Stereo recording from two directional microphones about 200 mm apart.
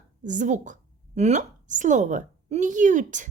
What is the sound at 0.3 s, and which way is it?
A woman's voice, 40° right (ahead or behind).